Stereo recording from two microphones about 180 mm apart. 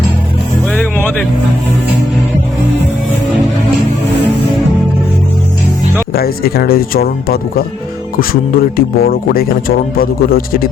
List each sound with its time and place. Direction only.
0.8 s music: 10° left (ahead or behind)
6.1 s a man's voice: 55° left (ahead or behind)